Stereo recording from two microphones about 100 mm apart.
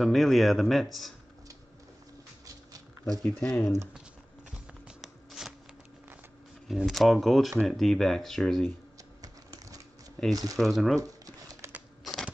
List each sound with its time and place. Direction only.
0.0 s speech: centre (ahead or behind)
2.4 s a sound: 35° right (ahead or behind)
3.3 s speech: 15° left (ahead or behind)
4.5 s shuffling cards: 5° right (ahead or behind)
6.7 s speech: centre (ahead or behind)
9.2 s typewriter: 40° right (ahead or behind)
10.3 s speech: 35° right (ahead or behind)
10.6 s speech: centre (ahead or behind)
11.0 s a sound: 35° right (ahead or behind)
12.0 s crushing: centre (ahead or behind)